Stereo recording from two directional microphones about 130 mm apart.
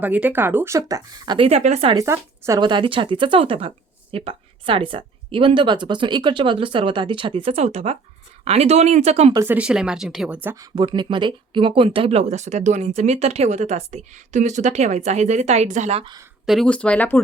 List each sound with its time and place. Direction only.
0.0 s speech: 10° right (ahead or behind); by 1.5 s 35° right (ahead or behind)
1.5 s speech: 55° right (ahead or behind)
2.1 s speech: 20° right (ahead or behind)
2.6 s a woman's voice: 35° right (ahead or behind); by 9.3 s 55° right (ahead or behind)
9.3 s speech: 20° right (ahead or behind)
9.6 s speech: 5° right (ahead or behind)
10.5 s speech: 30° right (ahead or behind); by 16.0 s 60° right (ahead or behind)
16.5 s speech: 5° left (ahead or behind)